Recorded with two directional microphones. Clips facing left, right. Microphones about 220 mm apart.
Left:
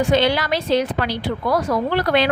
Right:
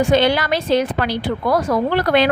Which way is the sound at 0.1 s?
50° right (ahead or behind).